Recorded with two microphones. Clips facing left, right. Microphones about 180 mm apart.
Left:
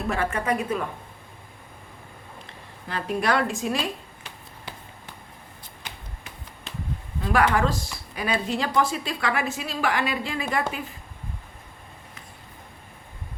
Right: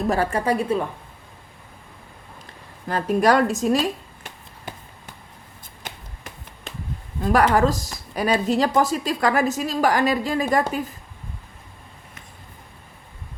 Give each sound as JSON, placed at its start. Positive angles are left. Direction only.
{"t": 0.1, "sound": "speech", "side_deg": -35}
{"t": 2.9, "sound": "speech", "side_deg": -40}
{"t": 7.2, "sound": "speech", "side_deg": -40}